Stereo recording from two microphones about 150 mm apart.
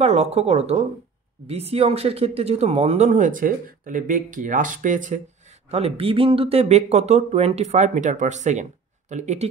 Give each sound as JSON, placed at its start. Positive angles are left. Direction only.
{"t": 0.0, "sound": "speech", "side_deg": -45}